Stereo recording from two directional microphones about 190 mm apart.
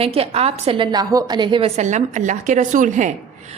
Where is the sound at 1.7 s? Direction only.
40° right (ahead or behind).